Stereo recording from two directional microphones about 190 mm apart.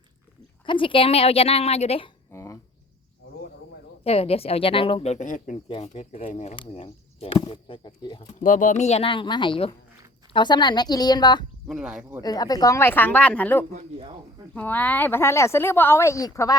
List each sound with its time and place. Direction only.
0.6 s speech: 25° left (ahead or behind)
2.3 s a sound: 15° left (ahead or behind)
4.0 s speech: 30° left (ahead or behind)
5.6 s speech: 30° left (ahead or behind)
8.4 s a woman's voice: 45° left (ahead or behind); by 11.4 s 20° left (ahead or behind)
11.7 s speech: 5° right (ahead or behind)
12.2 s speech: 20° left (ahead or behind)